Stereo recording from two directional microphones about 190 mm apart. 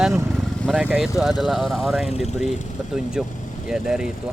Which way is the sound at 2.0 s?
35° left (ahead or behind).